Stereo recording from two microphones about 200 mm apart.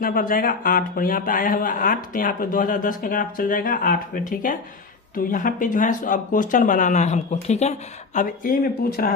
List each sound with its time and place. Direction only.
0.0 s a man's voice: 45° left (ahead or behind)